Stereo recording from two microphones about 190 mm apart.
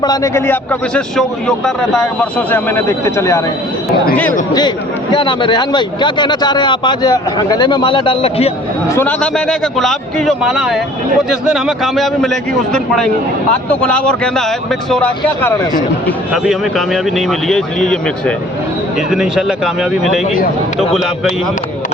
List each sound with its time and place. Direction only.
0.0 s speech: 20° left (ahead or behind)
5.1 s speech: 25° left (ahead or behind)
9.0 s speech: 5° left (ahead or behind)